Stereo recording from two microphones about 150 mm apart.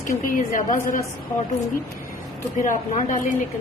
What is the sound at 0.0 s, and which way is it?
A woman's voice, 60° left (ahead or behind).